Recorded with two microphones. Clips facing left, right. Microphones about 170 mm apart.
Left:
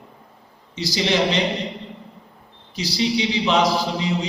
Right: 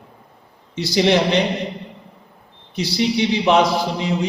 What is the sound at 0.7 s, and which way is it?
Speech, 55° right (ahead or behind).